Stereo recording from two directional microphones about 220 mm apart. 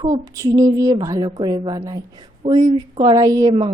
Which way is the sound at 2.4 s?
30° right (ahead or behind).